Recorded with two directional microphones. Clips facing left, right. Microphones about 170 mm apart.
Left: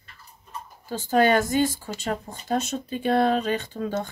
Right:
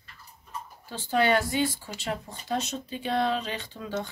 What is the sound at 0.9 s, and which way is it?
Speech, 45° left (ahead or behind).